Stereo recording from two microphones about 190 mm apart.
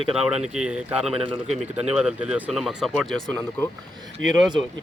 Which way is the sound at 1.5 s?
5° right (ahead or behind).